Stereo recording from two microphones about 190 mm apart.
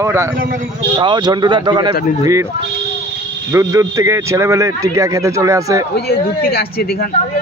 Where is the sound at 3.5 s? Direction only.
15° right (ahead or behind).